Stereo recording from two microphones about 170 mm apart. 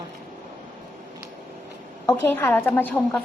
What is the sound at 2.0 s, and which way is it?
Speech, 15° left (ahead or behind).